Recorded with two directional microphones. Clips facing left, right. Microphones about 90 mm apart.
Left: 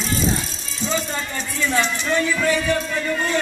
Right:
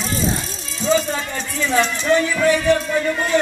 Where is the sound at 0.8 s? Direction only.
10° right (ahead or behind).